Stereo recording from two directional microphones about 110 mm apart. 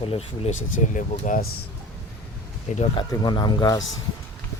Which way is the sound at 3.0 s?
45° left (ahead or behind).